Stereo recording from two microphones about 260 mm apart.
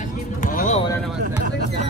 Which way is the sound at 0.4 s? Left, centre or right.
Left.